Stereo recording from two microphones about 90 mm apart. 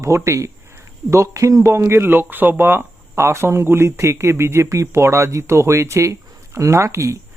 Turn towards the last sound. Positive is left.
turn(degrees=-35)  # may be behind; listen again after turning